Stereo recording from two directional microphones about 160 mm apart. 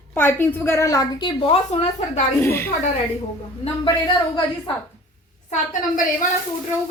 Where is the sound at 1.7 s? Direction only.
40° left (ahead or behind).